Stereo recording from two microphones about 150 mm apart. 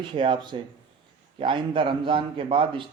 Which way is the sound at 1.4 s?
35° right (ahead or behind).